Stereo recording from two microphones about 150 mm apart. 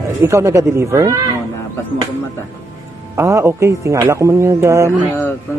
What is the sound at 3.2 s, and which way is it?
Speech, 20° right (ahead or behind).